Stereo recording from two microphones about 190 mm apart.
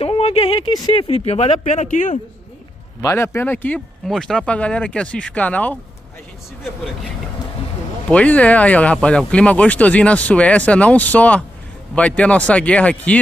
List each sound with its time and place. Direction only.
0.0 s speech: 30° left (ahead or behind)
3.0 s speech: 15° left (ahead or behind)
8.1 s speech: 5° left (ahead or behind)